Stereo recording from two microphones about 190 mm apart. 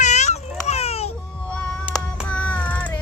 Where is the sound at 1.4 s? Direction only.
5° left (ahead or behind).